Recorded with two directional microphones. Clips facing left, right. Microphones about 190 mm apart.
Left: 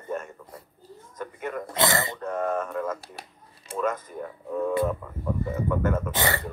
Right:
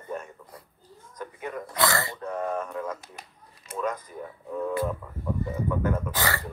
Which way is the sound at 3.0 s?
35° left (ahead or behind).